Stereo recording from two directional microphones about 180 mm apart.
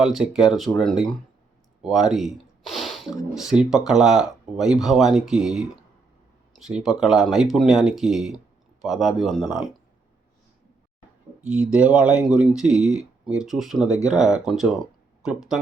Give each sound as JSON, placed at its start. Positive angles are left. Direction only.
{"t": 0.0, "sound": "speech", "side_deg": 0}
{"t": 11.3, "sound": "a sound", "side_deg": -10}
{"t": 11.7, "sound": "speech", "side_deg": -5}
{"t": 13.8, "sound": "speech", "side_deg": 20}
{"t": 14.1, "sound": "speech", "side_deg": -5}